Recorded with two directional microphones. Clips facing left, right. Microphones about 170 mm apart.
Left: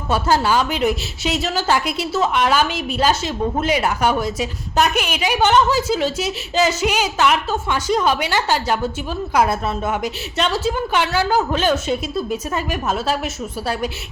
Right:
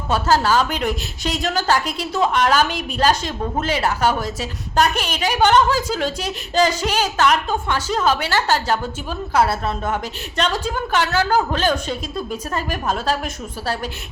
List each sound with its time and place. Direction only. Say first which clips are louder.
0.1 s a woman's voice: even; 10° left (ahead or behind)
2.6 s a woman's voice: left 2 dB; 45° right (ahead or behind)
3.0 s a woman's voice: even; 10° left (ahead or behind)